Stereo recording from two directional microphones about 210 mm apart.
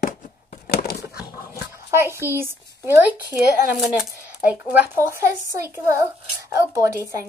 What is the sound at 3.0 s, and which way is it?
Speech, 5° right (ahead or behind).